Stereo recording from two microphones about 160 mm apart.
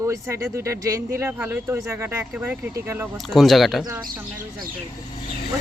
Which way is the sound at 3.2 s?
Centre (ahead or behind).